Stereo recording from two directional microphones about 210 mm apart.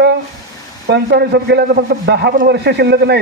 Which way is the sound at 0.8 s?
50° right (ahead or behind).